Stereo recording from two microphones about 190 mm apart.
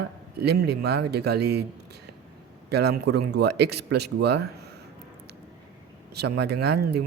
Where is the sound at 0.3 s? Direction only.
60° right (ahead or behind).